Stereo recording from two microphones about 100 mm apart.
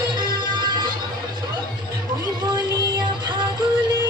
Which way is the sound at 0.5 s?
50° right (ahead or behind).